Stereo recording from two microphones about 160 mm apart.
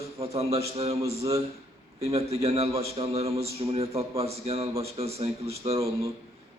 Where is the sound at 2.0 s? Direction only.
40° right (ahead or behind).